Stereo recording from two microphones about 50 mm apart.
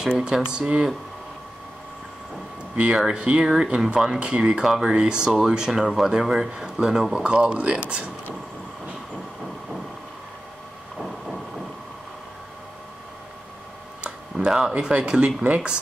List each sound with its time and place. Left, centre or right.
0.0 s speech: centre
2.7 s speech: centre
7.4 s speech: right
11.0 s a sound: centre
14.3 s a sound: centre
14.7 s speech: right